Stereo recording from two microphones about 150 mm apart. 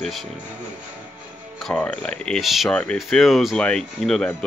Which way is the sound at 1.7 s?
5° left (ahead or behind).